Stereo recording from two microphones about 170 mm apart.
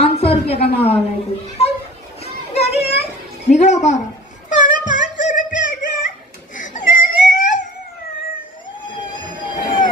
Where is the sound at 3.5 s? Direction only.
45° left (ahead or behind).